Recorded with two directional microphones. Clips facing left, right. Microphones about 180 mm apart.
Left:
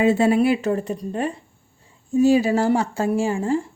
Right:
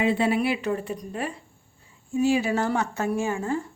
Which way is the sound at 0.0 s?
45° left (ahead or behind).